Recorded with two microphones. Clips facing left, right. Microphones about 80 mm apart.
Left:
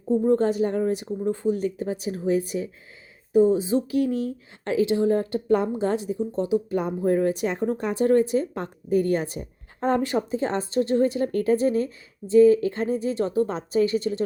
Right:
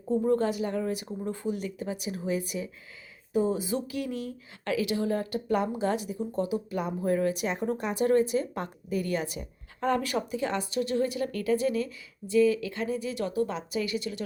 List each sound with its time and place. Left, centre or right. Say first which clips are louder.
0.1 s speech: left 5 dB; left
0.3 s speech: left 6 dB; left
3.3 s speech: left 8 dB; left
3.8 s speech: left 9 dB; left